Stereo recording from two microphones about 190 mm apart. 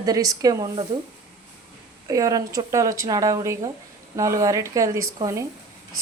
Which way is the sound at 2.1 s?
20° right (ahead or behind).